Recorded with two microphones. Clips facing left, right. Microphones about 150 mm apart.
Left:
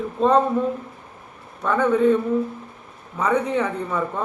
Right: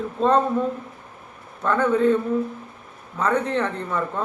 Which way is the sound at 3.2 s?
10° left (ahead or behind).